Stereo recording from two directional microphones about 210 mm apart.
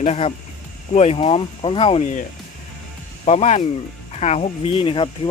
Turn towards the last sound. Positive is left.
turn(degrees=25)  # may be behind; listen again after turning